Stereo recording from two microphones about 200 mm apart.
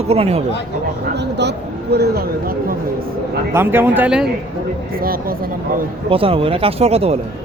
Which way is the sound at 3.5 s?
10° right (ahead or behind).